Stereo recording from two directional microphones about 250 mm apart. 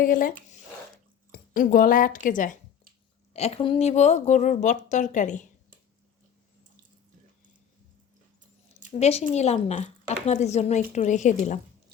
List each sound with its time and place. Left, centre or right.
0.0 s speech: left
9.0 s speech: left